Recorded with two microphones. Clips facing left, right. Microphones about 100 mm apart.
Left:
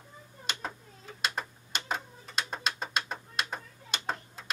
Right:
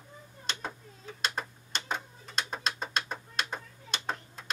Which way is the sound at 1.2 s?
5° left (ahead or behind).